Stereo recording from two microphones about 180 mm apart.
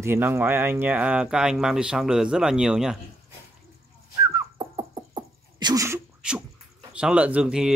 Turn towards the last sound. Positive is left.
turn(degrees=-5)  # may be behind; listen again after turning